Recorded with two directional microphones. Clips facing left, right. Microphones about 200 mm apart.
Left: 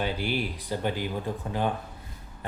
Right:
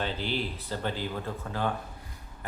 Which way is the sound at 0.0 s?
10° left (ahead or behind).